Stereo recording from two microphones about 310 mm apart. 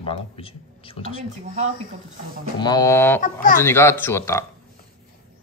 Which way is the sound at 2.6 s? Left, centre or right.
Centre.